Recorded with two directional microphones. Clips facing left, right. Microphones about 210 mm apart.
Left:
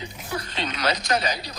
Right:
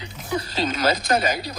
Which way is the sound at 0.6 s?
45° right (ahead or behind).